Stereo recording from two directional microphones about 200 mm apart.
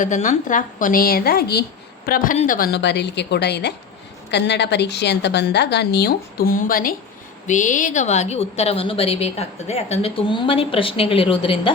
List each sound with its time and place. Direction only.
0.0 s a woman's voice: 35° left (ahead or behind)